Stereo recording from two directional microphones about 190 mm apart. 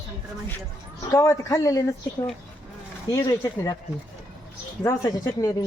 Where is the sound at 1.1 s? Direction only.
15° left (ahead or behind).